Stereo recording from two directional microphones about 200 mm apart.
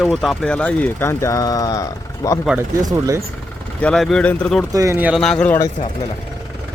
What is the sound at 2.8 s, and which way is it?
Speech, 15° right (ahead or behind).